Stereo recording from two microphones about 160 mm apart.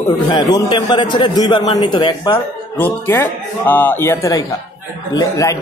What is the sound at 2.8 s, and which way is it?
Speech, 10° left (ahead or behind).